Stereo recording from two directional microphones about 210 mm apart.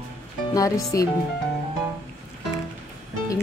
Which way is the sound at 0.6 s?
15° left (ahead or behind).